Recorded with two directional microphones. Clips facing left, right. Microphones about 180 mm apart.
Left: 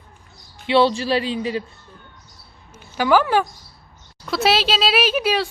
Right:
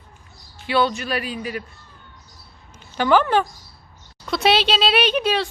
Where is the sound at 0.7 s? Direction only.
30° left (ahead or behind).